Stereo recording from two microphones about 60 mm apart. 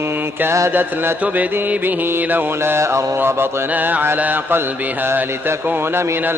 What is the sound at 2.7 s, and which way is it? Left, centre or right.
Mantra, right.